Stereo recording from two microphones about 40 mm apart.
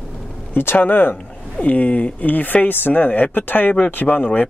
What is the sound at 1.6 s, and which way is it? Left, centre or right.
Speech, left.